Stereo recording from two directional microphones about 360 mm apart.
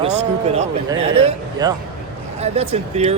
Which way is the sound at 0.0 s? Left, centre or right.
Centre.